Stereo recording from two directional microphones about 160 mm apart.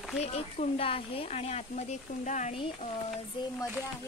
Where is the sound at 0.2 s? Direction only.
40° left (ahead or behind).